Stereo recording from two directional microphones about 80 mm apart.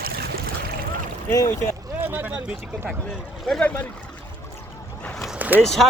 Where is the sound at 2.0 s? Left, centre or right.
Right.